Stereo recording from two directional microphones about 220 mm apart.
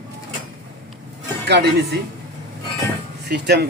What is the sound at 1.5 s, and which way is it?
Speech, 50° right (ahead or behind).